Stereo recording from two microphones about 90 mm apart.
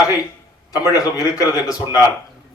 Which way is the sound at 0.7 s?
40° left (ahead or behind).